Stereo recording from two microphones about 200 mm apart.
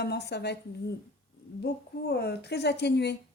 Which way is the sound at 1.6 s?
55° left (ahead or behind).